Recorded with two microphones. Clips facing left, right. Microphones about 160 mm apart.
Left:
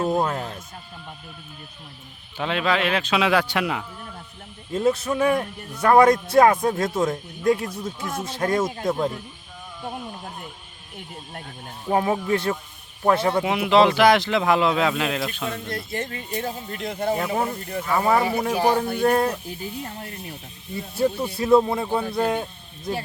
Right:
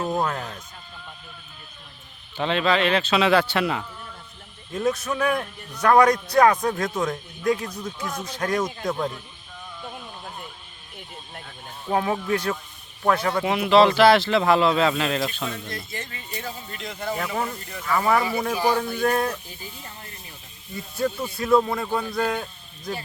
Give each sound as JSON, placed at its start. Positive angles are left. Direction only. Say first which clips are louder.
{"t": 0.1, "sound": "speech", "louder": "left 2 dB", "side_deg": 10}
{"t": 2.4, "sound": "speech", "louder": "right 1 dB", "side_deg": 10}
{"t": 5.1, "sound": "speech", "louder": "left 3 dB", "side_deg": 25}
{"t": 5.7, "sound": "speech", "louder": "left 1 dB", "side_deg": 5}
{"t": 6.1, "sound": "speech", "louder": "left 2 dB", "side_deg": 25}
{"t": 11.9, "sound": "speech", "louder": "left 2 dB", "side_deg": 15}
{"t": 13.1, "sound": "speech", "louder": "left 2 dB", "side_deg": 20}
{"t": 15.4, "sound": "speech", "louder": "left 3 dB", "side_deg": 55}
{"t": 17.3, "sound": "speech", "louder": "left 4 dB", "side_deg": 30}
{"t": 19.5, "sound": "speech", "louder": "left 8 dB", "side_deg": 60}
{"t": 20.7, "sound": "speech", "louder": "left 3 dB", "side_deg": 30}